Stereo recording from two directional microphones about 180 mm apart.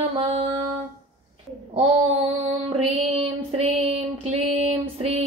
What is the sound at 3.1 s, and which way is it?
Female singing, 35° right (ahead or behind).